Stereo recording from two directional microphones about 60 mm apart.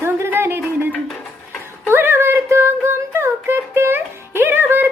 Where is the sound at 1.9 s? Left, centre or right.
Right.